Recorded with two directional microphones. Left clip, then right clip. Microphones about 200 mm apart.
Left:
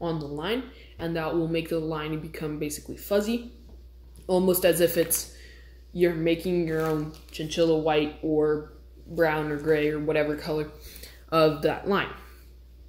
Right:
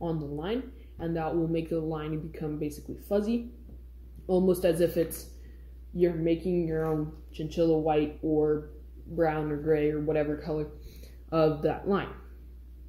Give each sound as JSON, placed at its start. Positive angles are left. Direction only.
{"t": 0.0, "sound": "speech", "side_deg": 5}
{"t": 7.4, "sound": "speech", "side_deg": 0}